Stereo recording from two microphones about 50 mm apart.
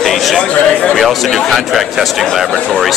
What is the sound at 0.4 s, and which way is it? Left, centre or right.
Speech, left.